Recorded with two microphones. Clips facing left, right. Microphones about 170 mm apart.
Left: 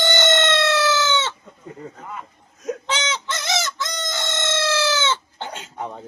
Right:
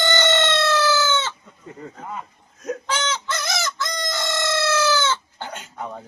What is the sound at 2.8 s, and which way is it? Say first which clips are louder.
Chicken: right 2 dB; 20° left (ahead or behind).